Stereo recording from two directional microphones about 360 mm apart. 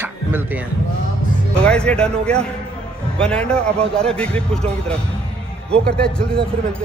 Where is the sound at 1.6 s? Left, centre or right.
Centre.